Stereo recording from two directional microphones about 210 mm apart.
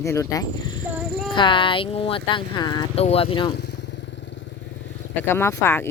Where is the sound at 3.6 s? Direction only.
50° left (ahead or behind).